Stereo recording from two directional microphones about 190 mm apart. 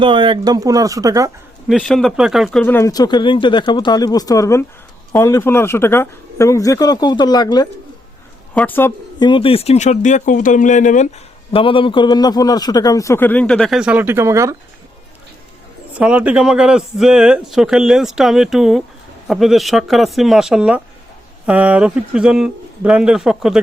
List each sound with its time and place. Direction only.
0.0 s speech: 25° right (ahead or behind)
1.6 s speech: centre (ahead or behind); by 7.7 s 20° left (ahead or behind)
8.5 s speech: 10° left (ahead or behind)
9.1 s speech: 25° left (ahead or behind); by 11.1 s 40° left (ahead or behind)
11.5 s speech: 25° left (ahead or behind); by 14.5 s 15° right (ahead or behind)
16.0 s speech: 5° right (ahead or behind)